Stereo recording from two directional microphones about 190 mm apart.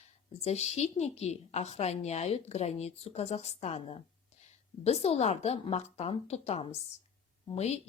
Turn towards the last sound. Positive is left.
turn(degrees=35)  # may be behind; listen again after turning